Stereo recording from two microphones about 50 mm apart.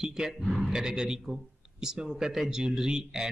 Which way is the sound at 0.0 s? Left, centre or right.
Centre.